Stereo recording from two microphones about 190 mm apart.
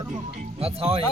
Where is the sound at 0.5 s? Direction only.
30° right (ahead or behind).